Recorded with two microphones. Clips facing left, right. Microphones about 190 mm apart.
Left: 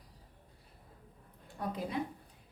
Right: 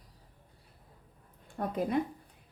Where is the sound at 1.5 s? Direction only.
50° right (ahead or behind).